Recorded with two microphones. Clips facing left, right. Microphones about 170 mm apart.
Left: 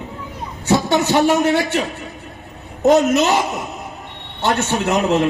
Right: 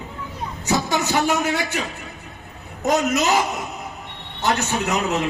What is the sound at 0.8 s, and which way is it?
Speech, 25° left (ahead or behind).